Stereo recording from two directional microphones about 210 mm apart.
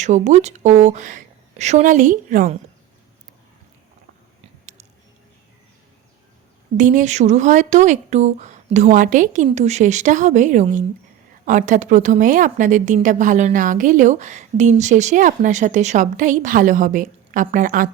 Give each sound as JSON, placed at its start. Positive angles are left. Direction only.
{"t": 0.0, "sound": "a woman's voice", "side_deg": -35}
{"t": 6.7, "sound": "a woman's voice", "side_deg": -35}